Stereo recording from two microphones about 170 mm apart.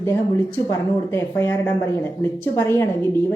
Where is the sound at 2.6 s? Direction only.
15° left (ahead or behind).